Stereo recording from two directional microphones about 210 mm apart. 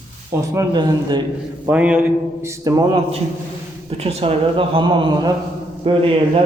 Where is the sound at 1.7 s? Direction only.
5° right (ahead or behind).